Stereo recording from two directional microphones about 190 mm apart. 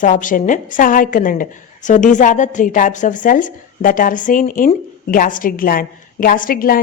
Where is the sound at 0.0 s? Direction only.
45° left (ahead or behind).